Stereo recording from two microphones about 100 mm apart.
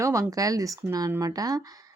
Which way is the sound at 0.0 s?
30° right (ahead or behind).